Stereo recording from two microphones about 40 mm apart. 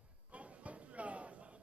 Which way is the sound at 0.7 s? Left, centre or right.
Right.